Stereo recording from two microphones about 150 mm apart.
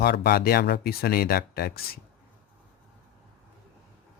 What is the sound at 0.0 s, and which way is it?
Speech, 90° left.